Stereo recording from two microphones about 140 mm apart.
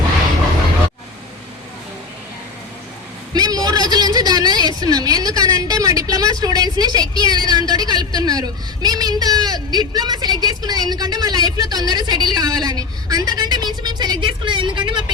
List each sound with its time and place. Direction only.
3.3 s a woman's voice: 30° right (ahead or behind)